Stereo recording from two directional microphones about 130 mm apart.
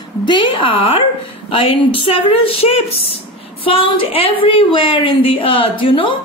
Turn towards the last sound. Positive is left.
turn(degrees=40)  # may be behind; listen again after turning